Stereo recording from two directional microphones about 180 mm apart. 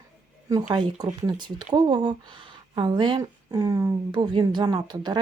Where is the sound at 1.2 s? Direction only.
25° right (ahead or behind).